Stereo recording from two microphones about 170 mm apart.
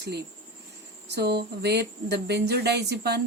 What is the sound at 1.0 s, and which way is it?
Speech, 75° right (ahead or behind).